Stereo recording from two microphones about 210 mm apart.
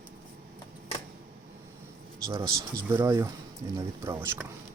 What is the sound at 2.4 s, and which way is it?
Speech, 15° right (ahead or behind).